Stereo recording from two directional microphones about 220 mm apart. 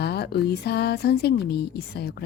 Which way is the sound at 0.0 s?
50° left (ahead or behind).